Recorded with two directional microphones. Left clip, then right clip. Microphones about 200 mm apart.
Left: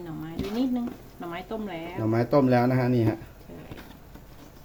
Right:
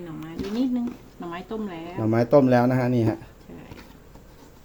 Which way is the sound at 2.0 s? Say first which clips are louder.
Right 4 dB; 20° right (ahead or behind).